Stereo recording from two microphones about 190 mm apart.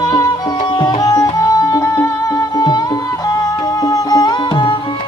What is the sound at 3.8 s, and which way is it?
Music, 20° left (ahead or behind).